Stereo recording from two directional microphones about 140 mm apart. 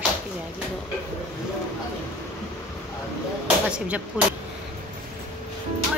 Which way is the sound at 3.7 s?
10° right (ahead or behind).